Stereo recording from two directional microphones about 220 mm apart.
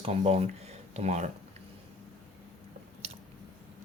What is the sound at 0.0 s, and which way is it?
Speech, 25° right (ahead or behind).